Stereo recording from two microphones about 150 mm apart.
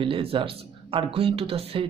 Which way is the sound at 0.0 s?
35° right (ahead or behind).